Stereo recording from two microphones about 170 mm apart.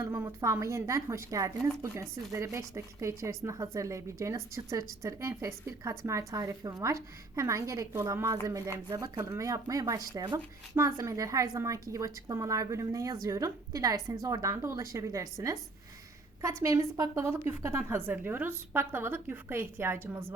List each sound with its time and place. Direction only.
0.0 s a woman's voice: 15° right (ahead or behind)